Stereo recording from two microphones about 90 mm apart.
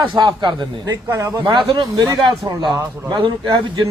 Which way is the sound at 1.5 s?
70° right (ahead or behind).